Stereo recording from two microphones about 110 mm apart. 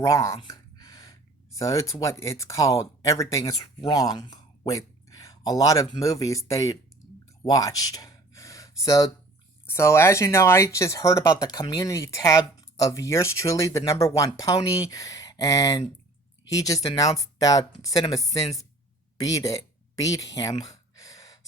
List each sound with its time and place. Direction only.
0.0 s speech: 30° left (ahead or behind)
0.4 s a sound: 35° left (ahead or behind)
1.5 s speech: 30° left (ahead or behind)
7.4 s a sound: 35° left (ahead or behind)
9.6 s speech: 25° left (ahead or behind)
19.2 s gasp: 35° left (ahead or behind)